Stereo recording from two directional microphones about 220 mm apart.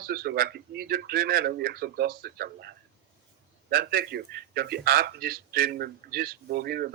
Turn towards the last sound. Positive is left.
turn(degrees=-45)  # may be behind; listen again after turning